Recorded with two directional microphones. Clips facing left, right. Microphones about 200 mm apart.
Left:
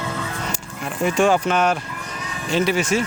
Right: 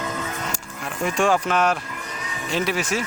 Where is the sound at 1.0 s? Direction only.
Centre (ahead or behind).